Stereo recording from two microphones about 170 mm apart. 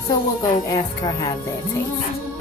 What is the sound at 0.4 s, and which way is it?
Speech, 20° left (ahead or behind).